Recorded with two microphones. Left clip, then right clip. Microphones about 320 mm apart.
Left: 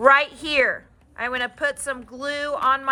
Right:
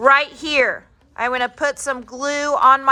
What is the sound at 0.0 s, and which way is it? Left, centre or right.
A woman's voice, centre.